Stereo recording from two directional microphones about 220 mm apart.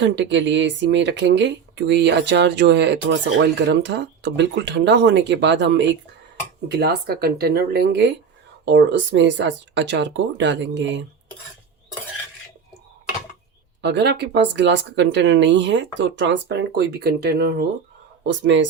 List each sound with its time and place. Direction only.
0.0 s speech: 55° right (ahead or behind)
13.8 s speech: 50° right (ahead or behind)